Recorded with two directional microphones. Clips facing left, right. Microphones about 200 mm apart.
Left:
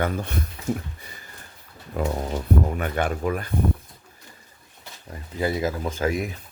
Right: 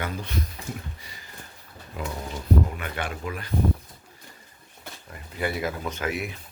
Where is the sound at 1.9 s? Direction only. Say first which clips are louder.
Left 7 dB; 45° left (ahead or behind).